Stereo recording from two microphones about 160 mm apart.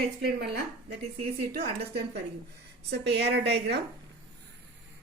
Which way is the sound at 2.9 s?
90° right.